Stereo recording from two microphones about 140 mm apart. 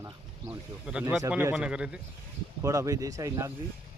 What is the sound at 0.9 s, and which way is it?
Speech, 10° right (ahead or behind).